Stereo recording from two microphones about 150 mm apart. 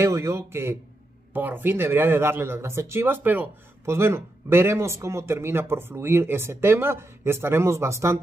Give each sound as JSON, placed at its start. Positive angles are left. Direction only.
{"t": 0.0, "sound": "speech", "side_deg": -20}